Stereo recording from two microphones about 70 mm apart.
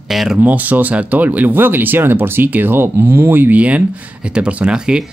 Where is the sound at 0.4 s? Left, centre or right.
Right.